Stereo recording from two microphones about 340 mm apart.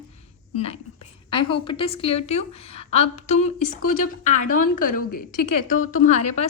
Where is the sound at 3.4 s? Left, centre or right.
Left.